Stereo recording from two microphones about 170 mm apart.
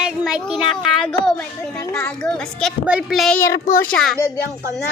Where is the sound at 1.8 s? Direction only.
15° left (ahead or behind).